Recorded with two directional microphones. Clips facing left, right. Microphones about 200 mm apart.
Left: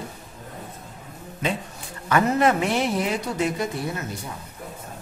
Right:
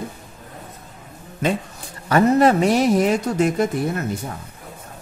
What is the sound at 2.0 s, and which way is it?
Speech, 35° right (ahead or behind).